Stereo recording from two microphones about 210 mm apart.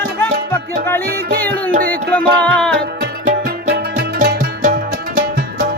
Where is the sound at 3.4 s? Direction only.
50° right (ahead or behind).